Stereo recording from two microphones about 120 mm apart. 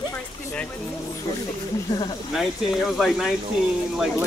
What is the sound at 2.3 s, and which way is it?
Speech, centre (ahead or behind).